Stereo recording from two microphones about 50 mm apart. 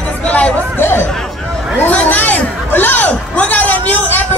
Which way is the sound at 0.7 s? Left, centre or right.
Left.